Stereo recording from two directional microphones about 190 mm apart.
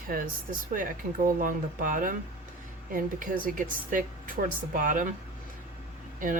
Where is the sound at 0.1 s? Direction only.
50° right (ahead or behind).